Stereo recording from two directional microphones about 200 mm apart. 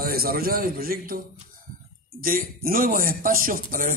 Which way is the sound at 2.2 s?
45° right (ahead or behind).